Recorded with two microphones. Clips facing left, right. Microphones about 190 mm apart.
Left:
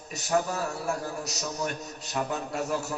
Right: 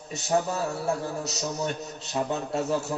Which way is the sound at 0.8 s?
25° right (ahead or behind).